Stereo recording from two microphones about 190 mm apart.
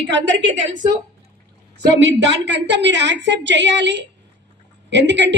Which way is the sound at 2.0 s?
70° right (ahead or behind).